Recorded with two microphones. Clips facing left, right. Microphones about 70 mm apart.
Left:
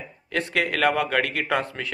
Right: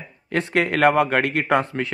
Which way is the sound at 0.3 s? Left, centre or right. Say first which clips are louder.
Right 4 dB; right.